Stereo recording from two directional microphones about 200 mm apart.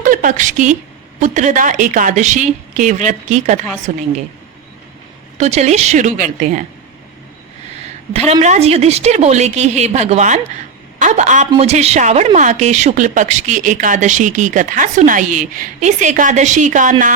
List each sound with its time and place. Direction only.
0.0 s a woman's voice: 40° right (ahead or behind)
5.4 s a woman's voice: 35° right (ahead or behind)
8.1 s a woman's voice: 30° right (ahead or behind)